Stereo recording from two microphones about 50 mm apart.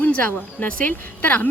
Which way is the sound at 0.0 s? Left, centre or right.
Left.